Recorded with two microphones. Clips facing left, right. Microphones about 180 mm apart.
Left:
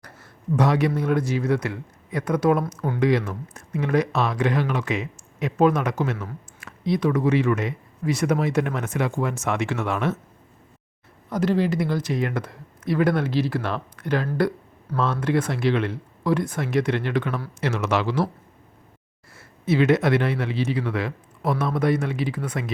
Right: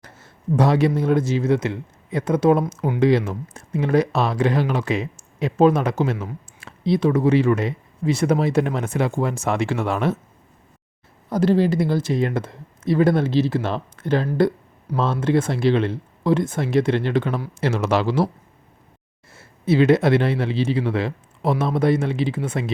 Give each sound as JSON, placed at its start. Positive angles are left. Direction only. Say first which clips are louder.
{"t": 0.0, "sound": "speech", "louder": "right 3 dB", "side_deg": -25}
{"t": 11.3, "sound": "speech", "louder": "right 4 dB", "side_deg": -30}
{"t": 19.4, "sound": "speech", "louder": "right 3 dB", "side_deg": -30}